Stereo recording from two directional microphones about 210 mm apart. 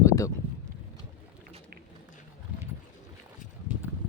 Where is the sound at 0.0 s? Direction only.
15° left (ahead or behind).